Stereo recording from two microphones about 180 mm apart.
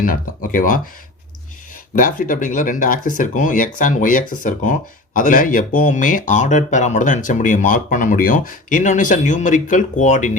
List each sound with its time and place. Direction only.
0.0 s speech: 50° left (ahead or behind)
2.0 s speech: 50° left (ahead or behind)